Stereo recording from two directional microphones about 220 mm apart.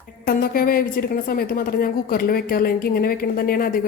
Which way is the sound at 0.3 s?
40° left (ahead or behind).